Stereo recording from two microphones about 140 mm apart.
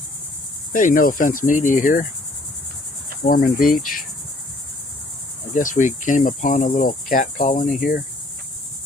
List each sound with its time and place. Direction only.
0.7 s cricket: 70° left (ahead or behind)
3.2 s cricket: 90° left
5.5 s cricket: 65° left (ahead or behind)